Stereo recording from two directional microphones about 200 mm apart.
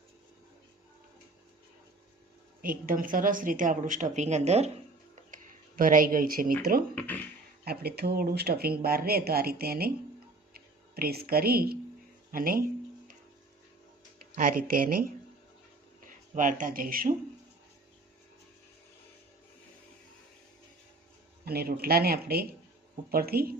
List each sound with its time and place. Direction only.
2.6 s a woman's voice: 45° right (ahead or behind)
14.3 s speech: 45° right (ahead or behind)
16.0 s speech: 40° right (ahead or behind)
21.4 s speech: 50° right (ahead or behind)